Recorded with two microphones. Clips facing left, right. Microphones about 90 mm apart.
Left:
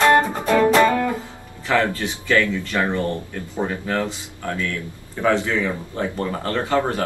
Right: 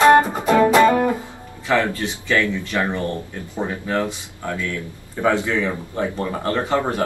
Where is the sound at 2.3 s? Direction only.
15° right (ahead or behind).